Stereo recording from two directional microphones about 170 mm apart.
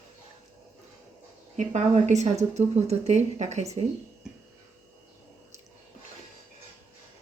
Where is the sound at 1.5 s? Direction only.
45° right (ahead or behind).